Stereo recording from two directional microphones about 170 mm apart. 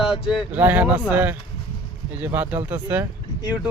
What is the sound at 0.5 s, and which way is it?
Speech, 10° right (ahead or behind).